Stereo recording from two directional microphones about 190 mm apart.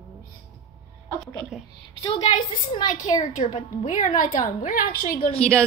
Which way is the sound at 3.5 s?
40° left (ahead or behind).